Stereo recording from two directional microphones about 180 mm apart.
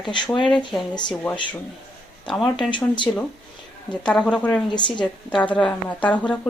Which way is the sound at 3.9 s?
5° left (ahead or behind).